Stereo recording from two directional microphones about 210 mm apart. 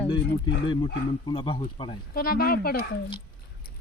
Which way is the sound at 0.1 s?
20° left (ahead or behind).